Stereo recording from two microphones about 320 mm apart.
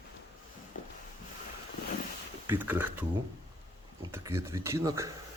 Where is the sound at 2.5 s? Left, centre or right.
Centre.